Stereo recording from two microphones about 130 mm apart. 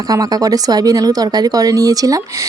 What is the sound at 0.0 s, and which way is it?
Speech, 30° right (ahead or behind).